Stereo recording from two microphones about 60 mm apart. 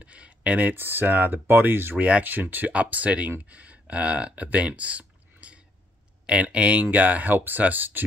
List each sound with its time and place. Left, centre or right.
0.0 s speech: right